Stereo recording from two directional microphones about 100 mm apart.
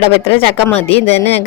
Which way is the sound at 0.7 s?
90° left.